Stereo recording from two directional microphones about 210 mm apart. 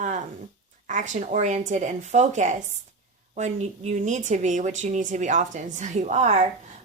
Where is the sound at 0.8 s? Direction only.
35° right (ahead or behind).